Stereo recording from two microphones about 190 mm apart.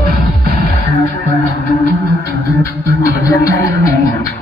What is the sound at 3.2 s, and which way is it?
Music, 15° left (ahead or behind).